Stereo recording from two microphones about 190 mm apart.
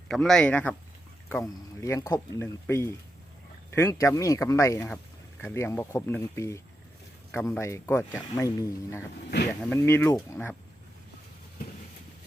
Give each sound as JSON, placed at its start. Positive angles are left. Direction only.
{"t": 0.1, "sound": "speech", "side_deg": 0}
{"t": 1.3, "sound": "speech", "side_deg": 15}